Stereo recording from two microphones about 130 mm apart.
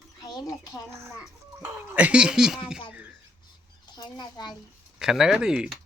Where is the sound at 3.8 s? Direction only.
35° left (ahead or behind).